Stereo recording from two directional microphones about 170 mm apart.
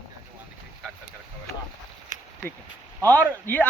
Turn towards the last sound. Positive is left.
turn(degrees=10)  # may be behind; listen again after turning